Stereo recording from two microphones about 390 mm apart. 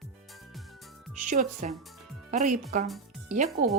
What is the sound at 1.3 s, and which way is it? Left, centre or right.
Speech, centre.